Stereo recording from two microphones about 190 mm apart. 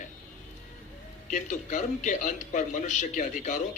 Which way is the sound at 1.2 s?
40° left (ahead or behind).